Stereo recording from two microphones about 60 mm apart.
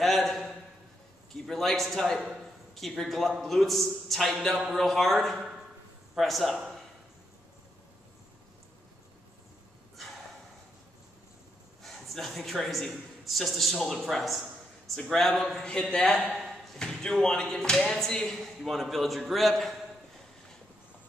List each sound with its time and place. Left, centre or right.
0.0 s a sound: centre
1.3 s a man's voice: centre
11.8 s a man's voice: centre
15.6 s speech: centre
16.3 s a man's voice: centre